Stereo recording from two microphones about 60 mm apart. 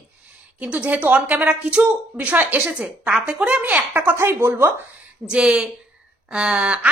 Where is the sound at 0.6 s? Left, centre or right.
Right.